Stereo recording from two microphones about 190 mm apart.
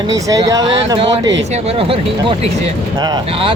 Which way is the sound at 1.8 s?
30° right (ahead or behind).